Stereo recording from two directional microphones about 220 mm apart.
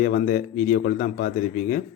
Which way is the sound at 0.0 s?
40° left (ahead or behind).